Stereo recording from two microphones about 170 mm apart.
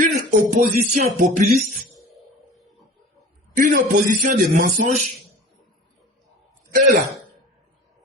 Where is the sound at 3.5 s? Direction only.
50° right (ahead or behind).